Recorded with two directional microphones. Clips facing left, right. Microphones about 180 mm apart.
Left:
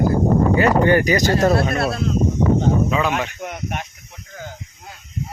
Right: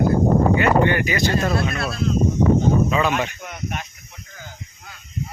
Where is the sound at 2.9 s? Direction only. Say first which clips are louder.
Even; 5° left (ahead or behind).